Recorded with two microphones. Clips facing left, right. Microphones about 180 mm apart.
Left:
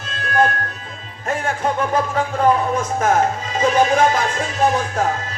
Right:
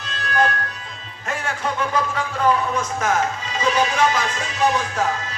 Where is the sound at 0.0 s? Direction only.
45° left (ahead or behind).